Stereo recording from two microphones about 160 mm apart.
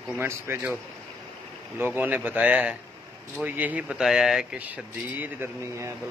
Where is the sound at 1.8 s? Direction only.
10° right (ahead or behind).